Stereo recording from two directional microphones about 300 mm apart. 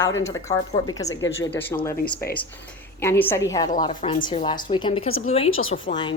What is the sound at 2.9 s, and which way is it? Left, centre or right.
Speech, centre.